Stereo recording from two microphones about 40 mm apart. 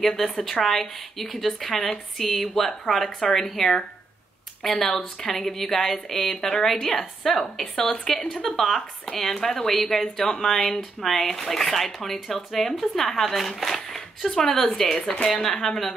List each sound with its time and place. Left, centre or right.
0.0 s speech: centre
15.1 s speech: left
15.4 s speech: centre